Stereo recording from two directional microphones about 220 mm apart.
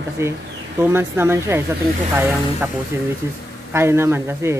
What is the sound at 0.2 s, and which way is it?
Speech, 10° right (ahead or behind).